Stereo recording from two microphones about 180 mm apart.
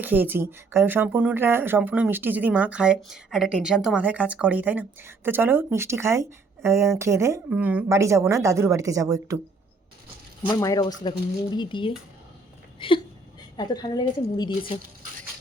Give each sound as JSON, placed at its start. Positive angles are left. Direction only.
{"t": 0.0, "sound": "speech", "side_deg": -10}
{"t": 10.5, "sound": "speech", "side_deg": 20}